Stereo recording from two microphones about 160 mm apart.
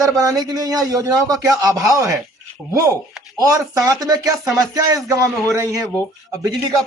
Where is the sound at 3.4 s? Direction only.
20° right (ahead or behind).